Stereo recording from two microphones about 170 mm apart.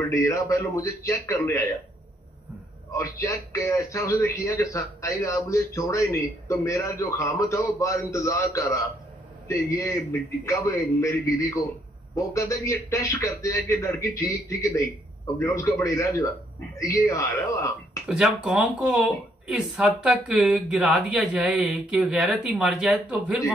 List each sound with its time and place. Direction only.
0.1 s a man's voice: 20° left (ahead or behind)
2.9 s a man's voice: 20° left (ahead or behind)
18.0 s speech: 5° right (ahead or behind)